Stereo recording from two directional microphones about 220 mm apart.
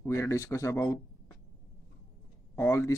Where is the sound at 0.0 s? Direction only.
15° left (ahead or behind).